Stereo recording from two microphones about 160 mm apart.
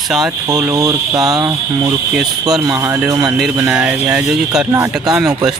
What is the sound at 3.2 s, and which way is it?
Speech, 5° right (ahead or behind).